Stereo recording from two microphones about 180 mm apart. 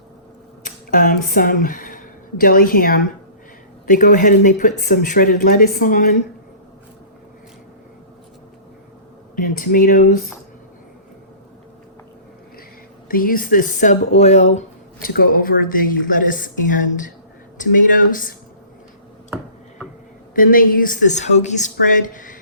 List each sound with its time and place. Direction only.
0.6 s speech: 50° left (ahead or behind)
9.3 s speech: 50° left (ahead or behind)
13.1 s speech: 50° left (ahead or behind)
15.0 s speech: 55° left (ahead or behind)
17.9 s speech: 50° left (ahead or behind)
20.3 s speech: 50° left (ahead or behind)